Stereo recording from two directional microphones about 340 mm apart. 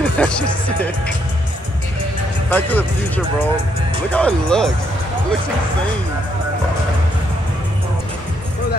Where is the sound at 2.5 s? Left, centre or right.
Centre.